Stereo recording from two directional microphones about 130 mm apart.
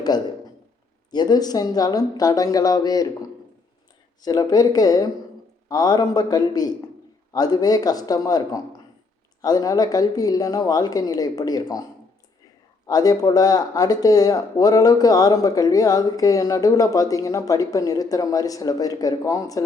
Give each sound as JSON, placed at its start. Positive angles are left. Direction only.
{"t": 1.1, "sound": "speech", "side_deg": 30}
{"t": 12.9, "sound": "speech", "side_deg": 30}